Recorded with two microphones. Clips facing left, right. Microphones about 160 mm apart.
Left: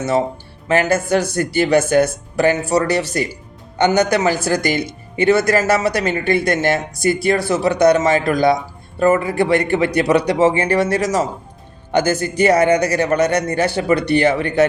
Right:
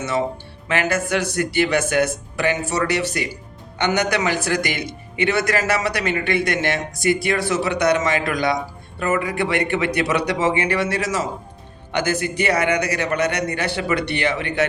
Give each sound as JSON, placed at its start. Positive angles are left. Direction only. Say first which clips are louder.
{"t": 0.7, "sound": "speech", "louder": "left 5 dB", "side_deg": 40}